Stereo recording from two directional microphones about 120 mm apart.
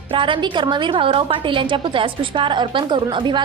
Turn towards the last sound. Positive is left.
turn(degrees=-40)  # may be behind; listen again after turning